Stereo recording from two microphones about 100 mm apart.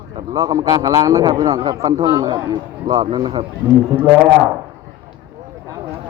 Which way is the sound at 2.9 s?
50° right (ahead or behind).